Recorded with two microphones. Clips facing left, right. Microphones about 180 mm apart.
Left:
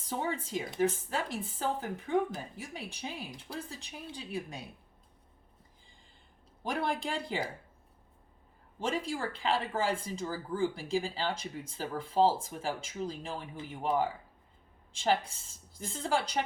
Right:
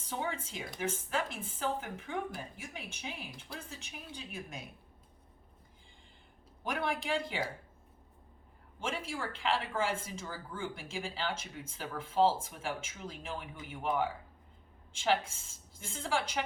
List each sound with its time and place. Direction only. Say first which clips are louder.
0.0 s speech: left 3 dB; 35° left (ahead or behind)
6.6 s a man's voice: left 2 dB; 30° left (ahead or behind)
9.0 s speech: left 2 dB; 35° left (ahead or behind)
15.0 s speech: left 1 dB; 35° left (ahead or behind)